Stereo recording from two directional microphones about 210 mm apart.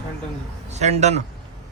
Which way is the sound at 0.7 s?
30° right (ahead or behind).